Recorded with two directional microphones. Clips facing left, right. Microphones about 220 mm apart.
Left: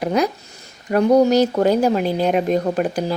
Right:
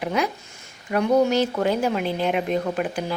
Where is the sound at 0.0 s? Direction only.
40° left (ahead or behind).